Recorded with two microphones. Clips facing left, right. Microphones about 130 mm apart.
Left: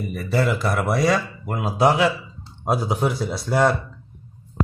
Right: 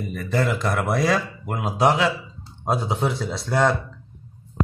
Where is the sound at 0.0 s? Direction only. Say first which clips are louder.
Left 1 dB; 10° left (ahead or behind).